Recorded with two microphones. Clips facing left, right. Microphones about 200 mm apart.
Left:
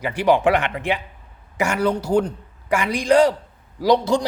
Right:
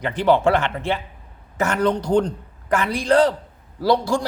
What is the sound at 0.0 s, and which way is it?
A man's voice, 10° left (ahead or behind).